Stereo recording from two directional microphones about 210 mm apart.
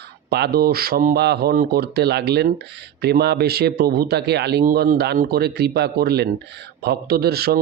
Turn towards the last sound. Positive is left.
turn(degrees=-50)  # may be behind; listen again after turning